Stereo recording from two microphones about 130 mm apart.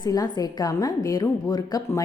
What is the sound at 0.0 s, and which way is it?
A woman's voice, 30° left (ahead or behind).